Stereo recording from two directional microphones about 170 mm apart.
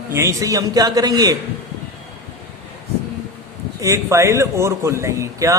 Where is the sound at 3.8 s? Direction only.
15° right (ahead or behind).